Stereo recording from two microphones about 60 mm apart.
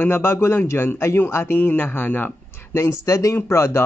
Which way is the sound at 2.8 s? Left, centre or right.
Left.